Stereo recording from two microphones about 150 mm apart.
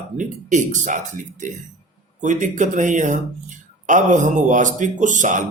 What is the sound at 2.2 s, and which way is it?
A man's voice, 55° right (ahead or behind).